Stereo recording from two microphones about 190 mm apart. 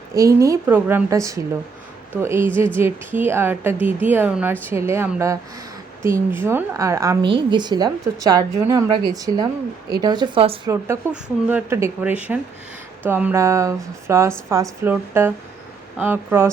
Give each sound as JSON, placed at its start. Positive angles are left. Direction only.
{"t": 0.1, "sound": "a woman's voice", "side_deg": -15}
{"t": 10.7, "sound": "speech", "side_deg": -10}